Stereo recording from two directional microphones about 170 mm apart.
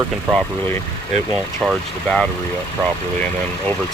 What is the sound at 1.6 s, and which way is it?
Speech, 5° left (ahead or behind).